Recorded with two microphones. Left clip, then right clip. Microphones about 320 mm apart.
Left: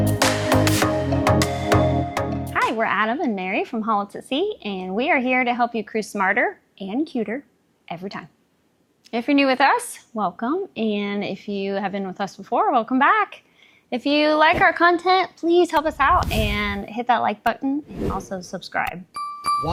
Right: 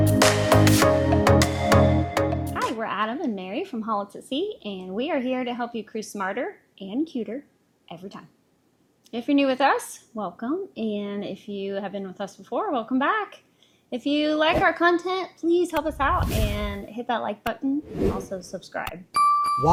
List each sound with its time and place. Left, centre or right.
0.0 s music: centre
2.6 s a sound: left
4.6 s a woman's voice: left
17.8 s a woman's voice: centre
18.3 s a woman's voice: left
18.9 s music: centre